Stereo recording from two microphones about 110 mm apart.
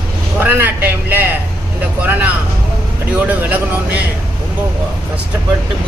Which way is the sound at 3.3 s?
15° right (ahead or behind).